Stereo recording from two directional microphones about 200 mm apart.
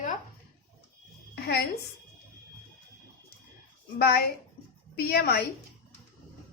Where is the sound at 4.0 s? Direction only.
50° left (ahead or behind).